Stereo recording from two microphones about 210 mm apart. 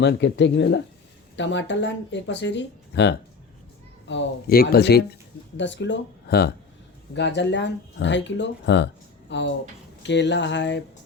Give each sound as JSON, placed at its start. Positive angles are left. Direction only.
{"t": 0.0, "sound": "speech", "side_deg": 55}